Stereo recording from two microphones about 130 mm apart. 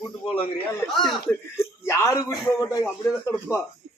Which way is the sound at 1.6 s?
20° left (ahead or behind).